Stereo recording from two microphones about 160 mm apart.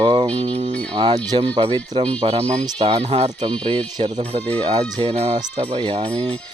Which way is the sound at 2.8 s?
40° right (ahead or behind).